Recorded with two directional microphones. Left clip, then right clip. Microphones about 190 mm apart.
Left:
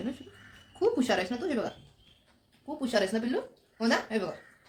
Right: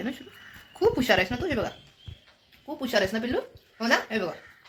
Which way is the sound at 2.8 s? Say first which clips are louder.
Right 3 dB; 15° right (ahead or behind).